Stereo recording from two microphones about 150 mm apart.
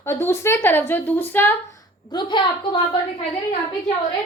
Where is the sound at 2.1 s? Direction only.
30° left (ahead or behind).